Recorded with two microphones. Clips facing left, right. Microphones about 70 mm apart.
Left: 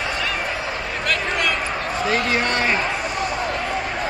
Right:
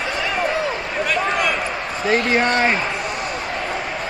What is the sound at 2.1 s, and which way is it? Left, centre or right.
Speech, right.